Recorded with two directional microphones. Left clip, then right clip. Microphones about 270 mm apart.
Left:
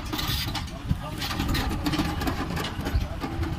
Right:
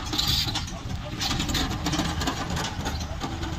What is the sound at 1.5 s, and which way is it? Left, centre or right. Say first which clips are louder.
Vehicle: right 1 dB; centre.